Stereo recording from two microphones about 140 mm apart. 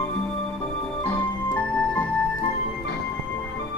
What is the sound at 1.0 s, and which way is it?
Music, 10° left (ahead or behind).